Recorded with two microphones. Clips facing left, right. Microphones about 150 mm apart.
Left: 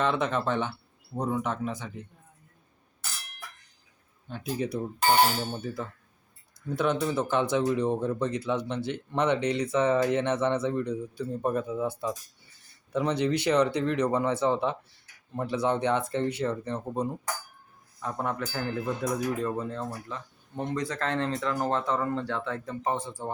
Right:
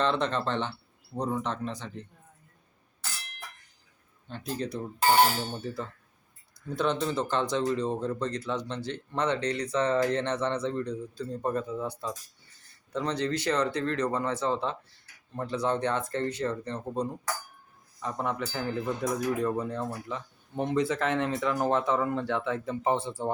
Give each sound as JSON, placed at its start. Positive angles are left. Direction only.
{"t": 0.0, "sound": "speech", "side_deg": 10}
{"t": 4.3, "sound": "speech", "side_deg": 10}
{"t": 12.9, "sound": "speech", "side_deg": 15}
{"t": 19.5, "sound": "speech", "side_deg": -15}